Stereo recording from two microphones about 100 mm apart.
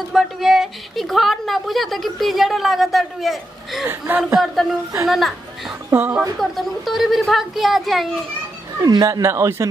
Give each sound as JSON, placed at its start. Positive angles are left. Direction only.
{"t": 0.1, "sound": "a woman's voice", "side_deg": -5}
{"t": 5.9, "sound": "a woman's voice", "side_deg": -20}
{"t": 6.3, "sound": "a woman's voice", "side_deg": 0}
{"t": 8.8, "sound": "speech", "side_deg": -40}